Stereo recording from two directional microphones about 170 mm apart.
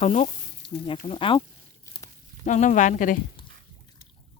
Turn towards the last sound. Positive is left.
turn(degrees=50)  # may be behind; listen again after turning